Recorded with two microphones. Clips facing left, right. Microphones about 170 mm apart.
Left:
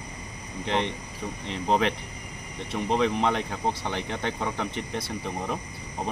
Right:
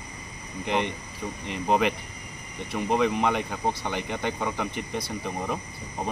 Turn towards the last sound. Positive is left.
turn(degrees=0)  # may be behind; listen again after turning